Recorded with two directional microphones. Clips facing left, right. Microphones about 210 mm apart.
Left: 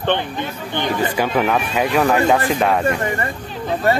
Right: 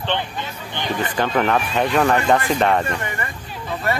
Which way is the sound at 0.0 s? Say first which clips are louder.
Left 4 dB; 55° left (ahead or behind).